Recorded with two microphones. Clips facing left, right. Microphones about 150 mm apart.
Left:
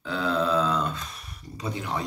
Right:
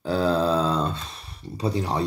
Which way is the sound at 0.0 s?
35° right (ahead or behind).